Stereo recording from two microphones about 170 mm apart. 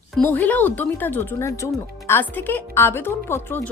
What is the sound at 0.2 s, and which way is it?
A woman's voice, 10° left (ahead or behind).